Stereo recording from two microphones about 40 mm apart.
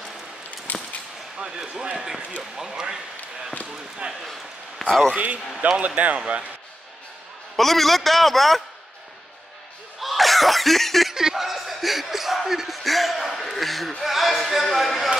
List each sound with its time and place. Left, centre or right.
0.7 s a sound: left
1.8 s speech: right
4.2 s a sound: centre
5.1 s speech: right
7.5 s speech: centre
9.9 s cough: centre
11.1 s speech: centre